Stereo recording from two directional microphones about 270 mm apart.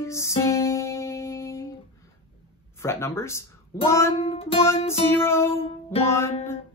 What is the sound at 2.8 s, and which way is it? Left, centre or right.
Speech, centre.